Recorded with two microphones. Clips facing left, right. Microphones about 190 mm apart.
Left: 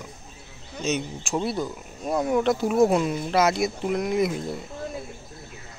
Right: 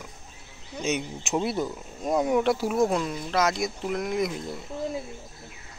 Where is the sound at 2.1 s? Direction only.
10° right (ahead or behind).